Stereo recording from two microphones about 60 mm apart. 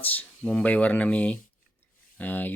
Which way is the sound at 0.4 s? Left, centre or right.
Left.